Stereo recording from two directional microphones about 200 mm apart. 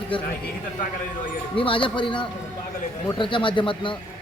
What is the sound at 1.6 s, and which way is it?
A man's voice, 25° left (ahead or behind).